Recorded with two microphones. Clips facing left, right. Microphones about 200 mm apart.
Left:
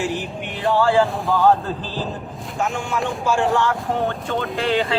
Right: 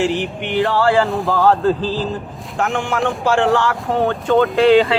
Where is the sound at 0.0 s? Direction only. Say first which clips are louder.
Right 6 dB; 80° right.